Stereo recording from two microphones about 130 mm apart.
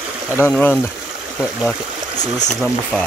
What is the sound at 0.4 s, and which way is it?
Speech, 15° left (ahead or behind).